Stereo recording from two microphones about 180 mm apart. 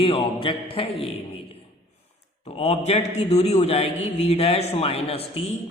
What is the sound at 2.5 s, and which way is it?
A man's voice, 35° left (ahead or behind).